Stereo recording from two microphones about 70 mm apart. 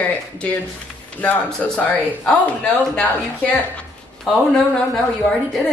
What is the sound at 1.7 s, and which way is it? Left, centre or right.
A woman's voice, left.